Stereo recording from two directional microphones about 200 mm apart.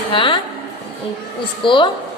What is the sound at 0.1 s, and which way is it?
Speech, 25° left (ahead or behind).